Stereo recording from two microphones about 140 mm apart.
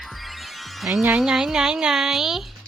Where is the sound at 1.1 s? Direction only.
5° right (ahead or behind).